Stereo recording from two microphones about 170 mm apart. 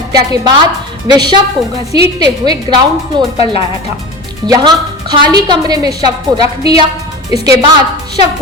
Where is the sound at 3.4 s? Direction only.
35° left (ahead or behind).